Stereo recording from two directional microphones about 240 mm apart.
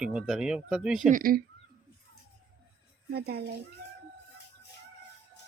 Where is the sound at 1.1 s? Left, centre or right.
Right.